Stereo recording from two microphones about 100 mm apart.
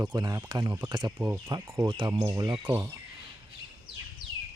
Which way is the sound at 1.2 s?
25° right (ahead or behind).